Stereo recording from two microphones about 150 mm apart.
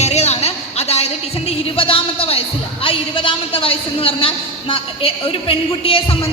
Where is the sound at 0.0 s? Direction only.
45° left (ahead or behind).